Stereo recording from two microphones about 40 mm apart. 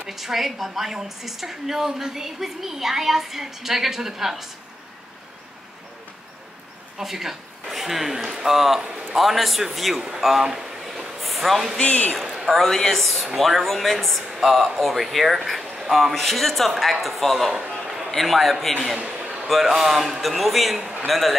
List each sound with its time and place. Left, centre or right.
0.0 s a woman's voice: centre
7.0 s a man's voice: centre
10.4 s a sound: centre
11.2 s speech: centre
11.8 s a man's voice: left
12.5 s a man's voice: centre
17.6 s a sound: centre
18.1 s a man's voice: centre
18.9 s a sound: right
19.4 s a man's voice: centre